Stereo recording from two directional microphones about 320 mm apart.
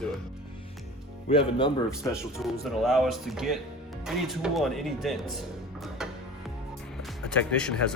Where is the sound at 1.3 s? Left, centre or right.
Centre.